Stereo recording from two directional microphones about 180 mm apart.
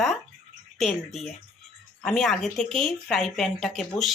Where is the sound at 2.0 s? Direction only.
5° left (ahead or behind).